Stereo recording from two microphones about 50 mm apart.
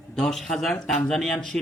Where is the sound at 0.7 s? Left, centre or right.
Centre.